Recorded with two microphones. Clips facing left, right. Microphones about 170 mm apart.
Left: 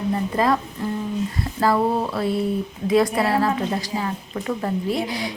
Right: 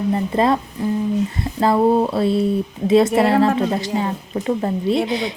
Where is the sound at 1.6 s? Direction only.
25° right (ahead or behind).